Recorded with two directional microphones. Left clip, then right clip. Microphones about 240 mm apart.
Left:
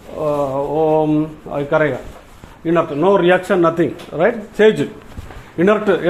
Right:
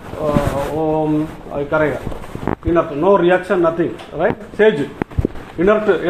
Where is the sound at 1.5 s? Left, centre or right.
Left.